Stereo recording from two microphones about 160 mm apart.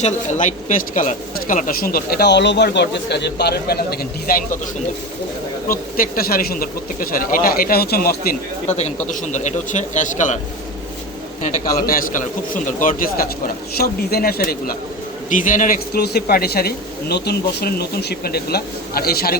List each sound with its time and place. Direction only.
0.0 s speech: 50° left (ahead or behind); by 4.4 s 75° left (ahead or behind)
6.0 s speech: 65° left (ahead or behind)
8.6 s a man's voice: 45° left (ahead or behind)
11.9 s speech: 60° left (ahead or behind)
13.7 s speech: 75° left (ahead or behind)
15.3 s speech: 55° left (ahead or behind); by 19.4 s 70° left (ahead or behind)